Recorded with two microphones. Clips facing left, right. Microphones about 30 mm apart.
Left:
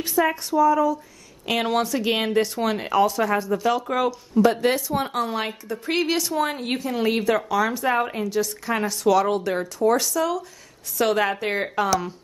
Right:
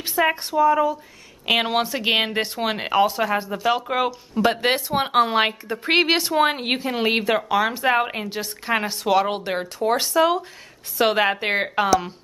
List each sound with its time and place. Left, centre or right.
0.0 s a woman's voice: right